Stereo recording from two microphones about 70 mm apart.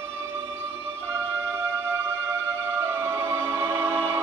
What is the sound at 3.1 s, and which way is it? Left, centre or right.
Music, right.